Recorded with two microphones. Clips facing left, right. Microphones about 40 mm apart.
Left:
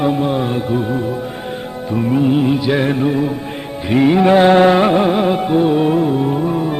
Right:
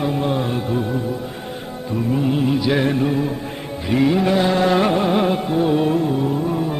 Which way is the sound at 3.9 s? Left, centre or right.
Left.